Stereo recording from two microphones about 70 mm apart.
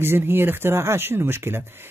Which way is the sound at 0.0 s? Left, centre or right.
Right.